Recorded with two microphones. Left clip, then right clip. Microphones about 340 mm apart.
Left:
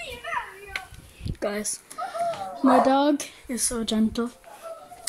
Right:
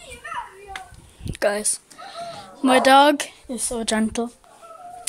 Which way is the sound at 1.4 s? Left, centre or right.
Centre.